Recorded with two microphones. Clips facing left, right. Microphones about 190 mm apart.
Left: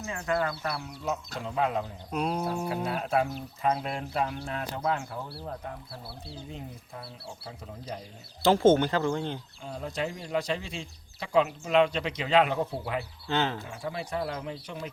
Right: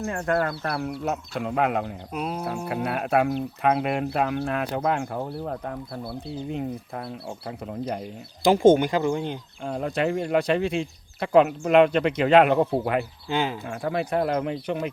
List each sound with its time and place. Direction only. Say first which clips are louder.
0.0 s speech: right 5 dB; 55° right (ahead or behind)
2.1 s speech: left 1 dB; 5° right (ahead or behind)
2.8 s speech: right 7 dB; 65° right (ahead or behind)
8.4 s speech: right 4 dB; 15° right (ahead or behind)
9.6 s speech: right 8 dB; 65° right (ahead or behind)
13.2 s speech: right 3 dB; 10° right (ahead or behind)
13.7 s speech: right 8 dB; 60° right (ahead or behind)